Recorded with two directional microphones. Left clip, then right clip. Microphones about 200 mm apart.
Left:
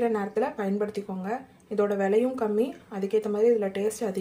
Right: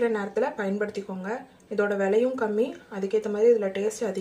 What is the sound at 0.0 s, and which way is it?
Speech, 15° left (ahead or behind).